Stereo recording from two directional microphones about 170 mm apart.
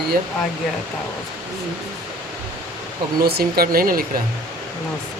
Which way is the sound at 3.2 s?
65° right (ahead or behind).